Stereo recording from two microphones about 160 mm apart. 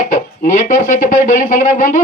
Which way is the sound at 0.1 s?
50° left (ahead or behind).